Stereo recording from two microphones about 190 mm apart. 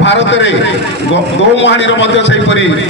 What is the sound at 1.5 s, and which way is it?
A man's voice, 75° left (ahead or behind).